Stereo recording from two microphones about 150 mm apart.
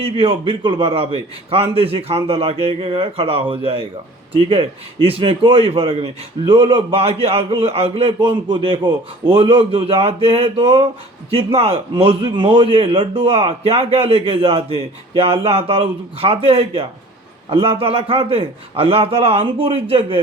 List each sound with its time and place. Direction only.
0.0 s a man's voice: 35° right (ahead or behind)